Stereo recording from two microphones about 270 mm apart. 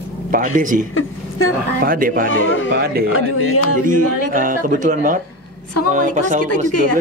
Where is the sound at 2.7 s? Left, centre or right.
Right.